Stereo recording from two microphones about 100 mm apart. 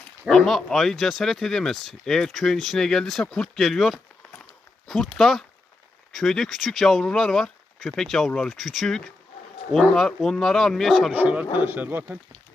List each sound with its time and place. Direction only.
0.3 s speech: 5° left (ahead or behind)
11.1 s speech: 15° right (ahead or behind)